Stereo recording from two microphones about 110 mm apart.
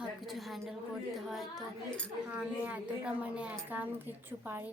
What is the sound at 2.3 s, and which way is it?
A woman's voice, 15° right (ahead or behind).